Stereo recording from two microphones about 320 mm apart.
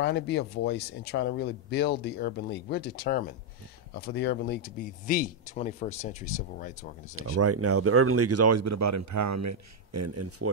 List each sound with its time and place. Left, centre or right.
0.0 s speech: left
7.2 s speech: right